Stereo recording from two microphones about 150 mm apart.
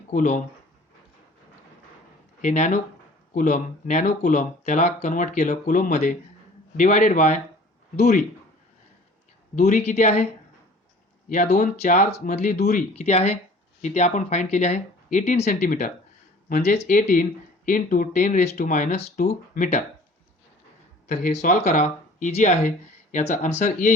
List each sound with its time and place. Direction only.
0.1 s speech: 60° left (ahead or behind)
2.4 s speech: 55° left (ahead or behind)
9.6 s speech: 55° left (ahead or behind)
11.3 s speech: 55° left (ahead or behind)
16.5 s speech: 50° left (ahead or behind)
21.1 s speech: 50° left (ahead or behind)